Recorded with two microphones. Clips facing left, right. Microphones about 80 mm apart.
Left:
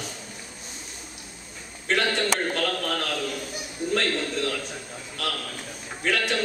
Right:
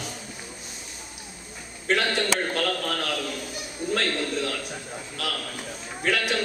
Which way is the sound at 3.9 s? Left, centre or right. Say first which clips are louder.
Even; centre.